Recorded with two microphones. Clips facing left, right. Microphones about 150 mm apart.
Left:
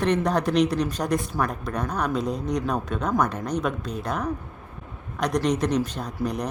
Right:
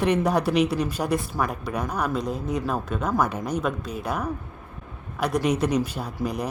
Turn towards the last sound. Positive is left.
turn(degrees=-5)  # may be behind; listen again after turning